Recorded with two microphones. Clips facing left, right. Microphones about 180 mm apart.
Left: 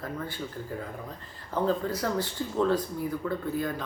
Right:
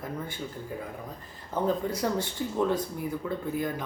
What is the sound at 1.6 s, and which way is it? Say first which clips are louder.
Speech: even; 15° right (ahead or behind).